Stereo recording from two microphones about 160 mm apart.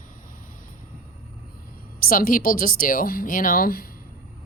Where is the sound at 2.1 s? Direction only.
60° left (ahead or behind).